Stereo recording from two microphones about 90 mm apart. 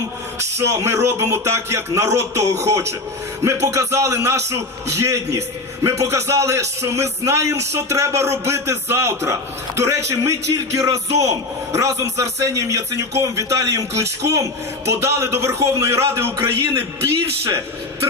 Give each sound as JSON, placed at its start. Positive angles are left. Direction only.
{"t": 0.3, "sound": "speech", "side_deg": -30}